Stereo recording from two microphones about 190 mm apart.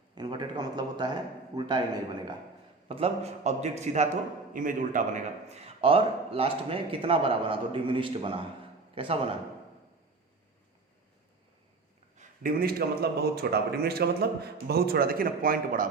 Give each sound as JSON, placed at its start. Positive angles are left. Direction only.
{"t": 0.2, "sound": "a man's voice", "side_deg": -25}
{"t": 2.9, "sound": "a man's voice", "side_deg": -35}
{"t": 12.1, "sound": "speech", "side_deg": -45}